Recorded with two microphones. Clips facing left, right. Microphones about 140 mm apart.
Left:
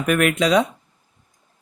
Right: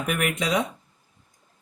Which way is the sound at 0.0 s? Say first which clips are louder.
Left 8 dB; 85° left.